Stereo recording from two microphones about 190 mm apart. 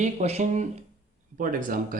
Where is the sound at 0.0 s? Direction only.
35° right (ahead or behind).